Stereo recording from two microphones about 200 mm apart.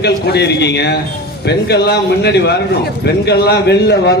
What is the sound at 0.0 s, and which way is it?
A man's voice, 55° left (ahead or behind).